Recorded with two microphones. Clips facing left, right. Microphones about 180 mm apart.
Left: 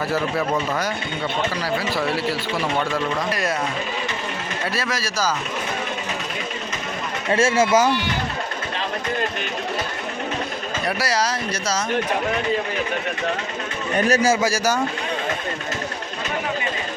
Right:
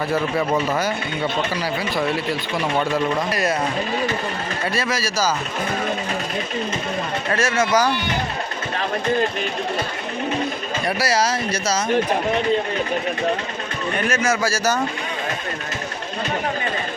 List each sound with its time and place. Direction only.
0.1 s speech: centre (ahead or behind)
4.7 s speech: centre (ahead or behind)
7.3 s speech: 25° left (ahead or behind)
11.0 s speech: 5° right (ahead or behind)
13.9 s a man's voice: 35° left (ahead or behind)
14.4 s speech: 15° left (ahead or behind)